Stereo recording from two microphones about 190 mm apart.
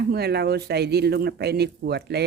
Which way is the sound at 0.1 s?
55° right (ahead or behind).